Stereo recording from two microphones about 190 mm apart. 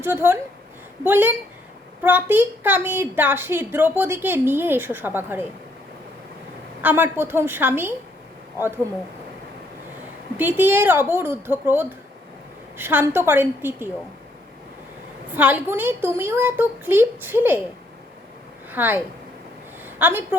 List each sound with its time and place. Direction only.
0.0 s a woman's voice: 10° right (ahead or behind)
6.8 s a woman's voice: 10° right (ahead or behind)
10.3 s a woman's voice: 10° right (ahead or behind)
15.3 s a woman's voice: 10° right (ahead or behind)
18.7 s a woman's voice: 10° right (ahead or behind)